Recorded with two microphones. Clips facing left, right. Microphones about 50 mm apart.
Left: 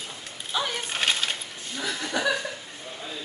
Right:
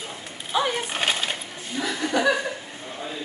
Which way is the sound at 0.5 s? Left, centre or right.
Right.